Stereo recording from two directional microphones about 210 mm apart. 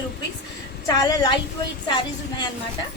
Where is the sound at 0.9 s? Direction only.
20° left (ahead or behind).